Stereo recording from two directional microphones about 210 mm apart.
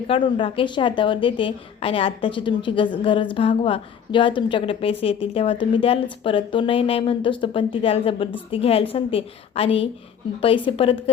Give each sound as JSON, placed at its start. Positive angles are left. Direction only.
{"t": 0.1, "sound": "a woman's voice", "side_deg": 25}